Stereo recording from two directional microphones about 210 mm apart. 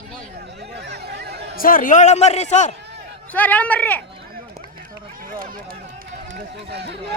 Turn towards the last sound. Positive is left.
turn(degrees=-50)  # may be behind; listen again after turning